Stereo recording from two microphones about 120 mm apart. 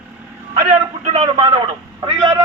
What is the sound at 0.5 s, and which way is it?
Speech, 80° right.